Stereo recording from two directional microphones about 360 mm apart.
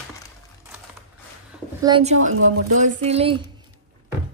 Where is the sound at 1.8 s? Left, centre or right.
Centre.